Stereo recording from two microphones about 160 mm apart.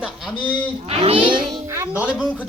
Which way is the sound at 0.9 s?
35° right (ahead or behind).